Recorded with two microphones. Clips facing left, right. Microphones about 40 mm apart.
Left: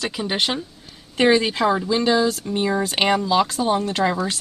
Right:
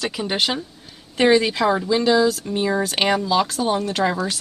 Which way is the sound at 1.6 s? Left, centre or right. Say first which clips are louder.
Even; centre.